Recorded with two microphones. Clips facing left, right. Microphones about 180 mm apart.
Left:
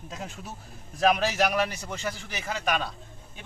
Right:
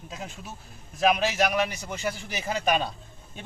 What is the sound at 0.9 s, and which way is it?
Speech, 5° right (ahead or behind).